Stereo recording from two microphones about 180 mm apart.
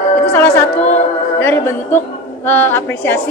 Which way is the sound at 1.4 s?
10° left (ahead or behind).